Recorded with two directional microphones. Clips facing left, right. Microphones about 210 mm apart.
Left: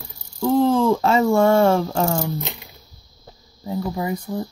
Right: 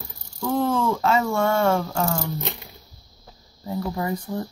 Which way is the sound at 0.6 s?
35° left (ahead or behind).